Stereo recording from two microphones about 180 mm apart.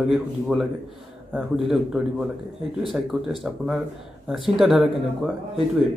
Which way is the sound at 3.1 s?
5° right (ahead or behind).